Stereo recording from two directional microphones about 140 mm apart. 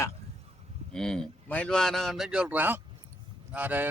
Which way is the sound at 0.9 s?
5° left (ahead or behind).